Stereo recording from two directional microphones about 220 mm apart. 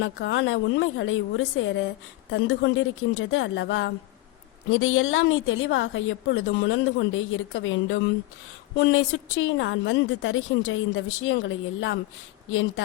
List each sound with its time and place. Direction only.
0.0 s a woman's voice: 60° left (ahead or behind)